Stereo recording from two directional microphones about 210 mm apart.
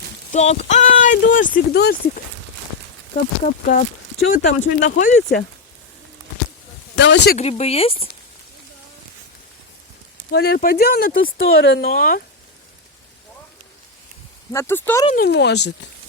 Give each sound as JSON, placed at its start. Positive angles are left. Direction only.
{"t": 0.3, "sound": "speech", "side_deg": 30}
{"t": 3.4, "sound": "speech", "side_deg": 35}
{"t": 4.3, "sound": "speech", "side_deg": 65}
{"t": 4.8, "sound": "speech", "side_deg": 40}
{"t": 6.9, "sound": "speech", "side_deg": 55}
{"t": 7.3, "sound": "speech", "side_deg": 30}
{"t": 10.3, "sound": "speech", "side_deg": 50}
{"t": 14.5, "sound": "speech", "side_deg": 10}
{"t": 15.1, "sound": "speech", "side_deg": 50}